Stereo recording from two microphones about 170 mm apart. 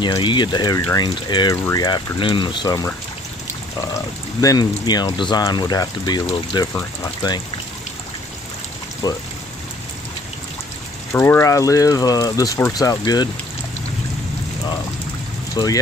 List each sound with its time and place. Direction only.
0.0 s speech: 25° left (ahead or behind)
4.4 s speech: 25° left (ahead or behind)
9.0 s speech: 20° left (ahead or behind)
11.1 s speech: 10° left (ahead or behind)
15.5 s speech: 20° left (ahead or behind)